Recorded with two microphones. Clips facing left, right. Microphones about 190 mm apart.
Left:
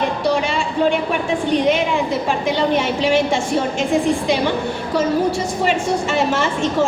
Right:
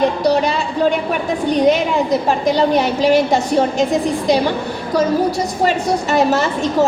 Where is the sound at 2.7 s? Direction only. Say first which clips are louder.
Right 3 dB; 40° right (ahead or behind).